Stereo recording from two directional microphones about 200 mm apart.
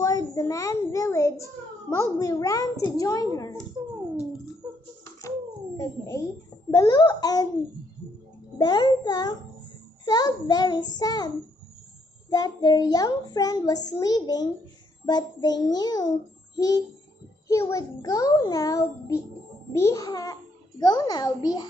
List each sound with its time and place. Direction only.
0.0 s a sound: 15° left (ahead or behind)
1.9 s a child's voice: 15° left (ahead or behind)
5.8 s a child's voice: 15° left (ahead or behind)
8.5 s a child's voice: 20° left (ahead or behind)